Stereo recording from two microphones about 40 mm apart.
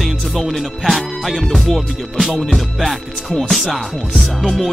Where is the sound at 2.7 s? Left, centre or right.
Centre.